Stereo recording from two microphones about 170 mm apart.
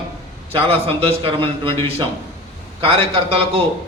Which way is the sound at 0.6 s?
35° right (ahead or behind).